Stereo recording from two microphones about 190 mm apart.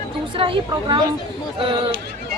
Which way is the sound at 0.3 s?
30° right (ahead or behind).